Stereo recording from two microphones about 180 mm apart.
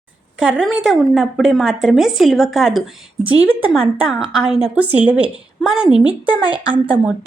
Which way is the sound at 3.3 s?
30° right (ahead or behind).